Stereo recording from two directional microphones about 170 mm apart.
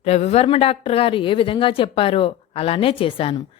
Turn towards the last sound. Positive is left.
turn(degrees=30)  # may be behind; listen again after turning